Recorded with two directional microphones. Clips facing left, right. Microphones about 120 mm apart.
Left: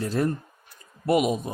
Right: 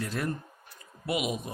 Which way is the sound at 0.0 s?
35° left (ahead or behind).